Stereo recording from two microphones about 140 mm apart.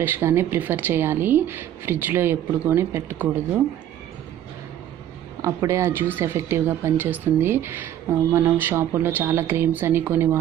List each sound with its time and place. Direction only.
0.0 s speech: 15° right (ahead or behind)
5.4 s speech: 20° right (ahead or behind)